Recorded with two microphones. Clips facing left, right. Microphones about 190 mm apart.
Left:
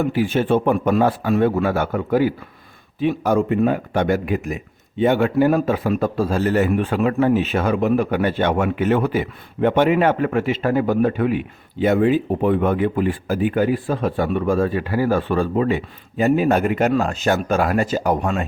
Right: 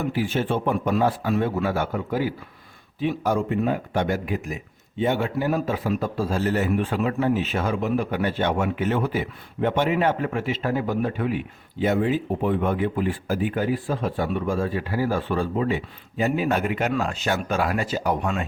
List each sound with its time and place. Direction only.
0.0 s speech: 60° left (ahead or behind)